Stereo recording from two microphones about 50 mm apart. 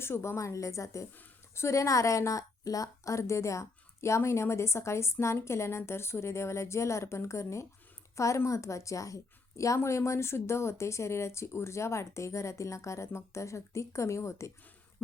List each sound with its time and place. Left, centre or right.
0.0 s a woman's voice: left
1.5 s a woman's voice: left
8.1 s a woman's voice: left